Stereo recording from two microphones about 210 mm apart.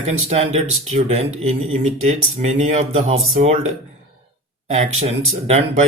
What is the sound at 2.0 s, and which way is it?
Speech, 35° right (ahead or behind).